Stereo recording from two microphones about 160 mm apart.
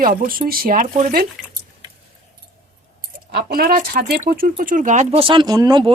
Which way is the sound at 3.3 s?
75° right (ahead or behind).